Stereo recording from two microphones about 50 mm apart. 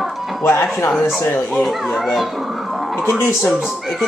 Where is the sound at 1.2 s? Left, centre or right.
Left.